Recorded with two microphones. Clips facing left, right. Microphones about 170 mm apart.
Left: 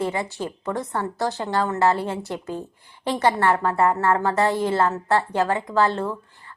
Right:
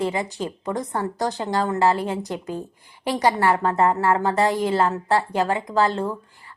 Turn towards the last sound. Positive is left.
turn(degrees=-15)  # may be behind; listen again after turning